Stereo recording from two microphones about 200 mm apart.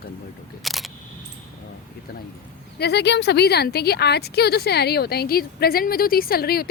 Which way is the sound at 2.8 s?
55° left (ahead or behind).